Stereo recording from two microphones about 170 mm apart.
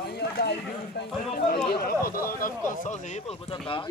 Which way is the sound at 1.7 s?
60° left (ahead or behind).